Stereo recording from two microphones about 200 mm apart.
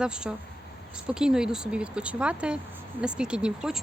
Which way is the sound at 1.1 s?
5° right (ahead or behind).